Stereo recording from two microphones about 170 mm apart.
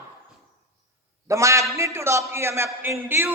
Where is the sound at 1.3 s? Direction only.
15° right (ahead or behind).